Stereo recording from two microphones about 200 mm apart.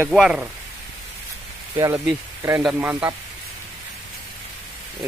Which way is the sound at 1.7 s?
15° right (ahead or behind).